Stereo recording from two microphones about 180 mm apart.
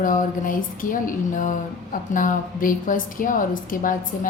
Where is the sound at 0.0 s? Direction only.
50° left (ahead or behind).